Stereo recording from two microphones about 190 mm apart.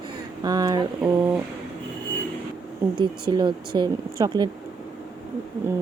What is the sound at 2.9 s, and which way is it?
Speech, 25° right (ahead or behind).